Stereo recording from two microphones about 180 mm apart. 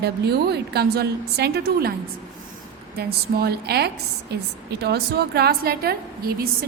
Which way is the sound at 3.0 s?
60° right (ahead or behind).